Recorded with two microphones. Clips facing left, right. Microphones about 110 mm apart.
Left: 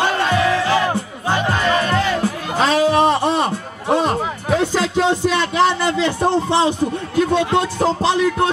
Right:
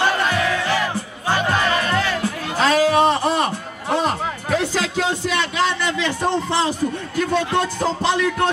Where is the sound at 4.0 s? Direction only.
25° left (ahead or behind).